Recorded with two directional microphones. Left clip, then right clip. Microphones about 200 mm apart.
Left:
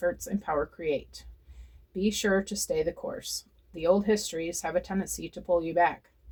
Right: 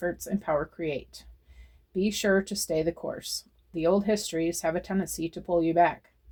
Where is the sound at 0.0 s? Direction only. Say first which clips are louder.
Left 1 dB; 40° right (ahead or behind).